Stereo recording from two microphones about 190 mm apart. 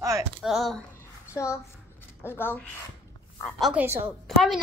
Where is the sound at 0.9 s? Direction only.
15° left (ahead or behind).